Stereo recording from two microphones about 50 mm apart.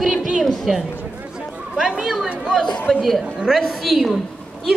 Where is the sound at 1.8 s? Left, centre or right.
Centre.